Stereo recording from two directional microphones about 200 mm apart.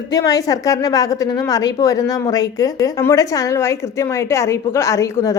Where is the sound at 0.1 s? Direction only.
20° left (ahead or behind).